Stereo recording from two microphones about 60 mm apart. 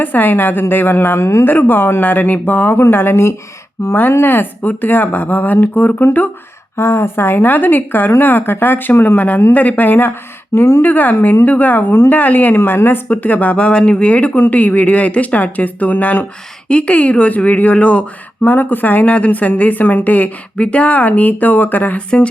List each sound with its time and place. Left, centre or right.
0.0 s speech: left
1.5 s speech: left
3.8 s speech: left
4.1 s speech: left
6.7 s speech: left